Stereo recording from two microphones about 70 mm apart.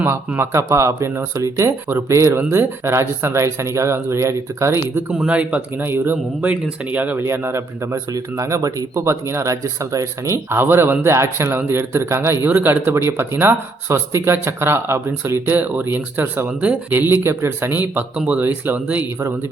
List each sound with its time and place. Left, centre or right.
0.0 s speech: right
5.1 s speech: centre
7.3 s speech: right
8.1 s speech: right
12.5 s speech: right